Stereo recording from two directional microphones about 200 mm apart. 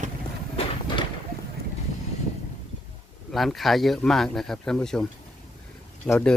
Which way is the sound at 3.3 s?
Centre (ahead or behind).